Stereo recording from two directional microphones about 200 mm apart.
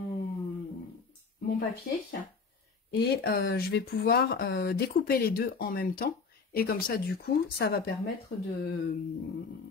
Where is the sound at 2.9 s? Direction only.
50° left (ahead or behind).